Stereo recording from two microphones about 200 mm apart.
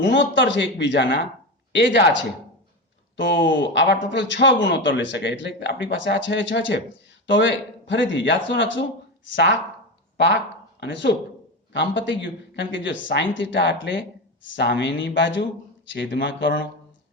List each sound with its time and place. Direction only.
0.0 s a man's voice: 65° left (ahead or behind)
3.3 s a man's voice: 65° left (ahead or behind)